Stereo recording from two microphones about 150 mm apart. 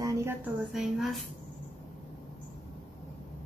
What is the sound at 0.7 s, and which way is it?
Speech, centre (ahead or behind).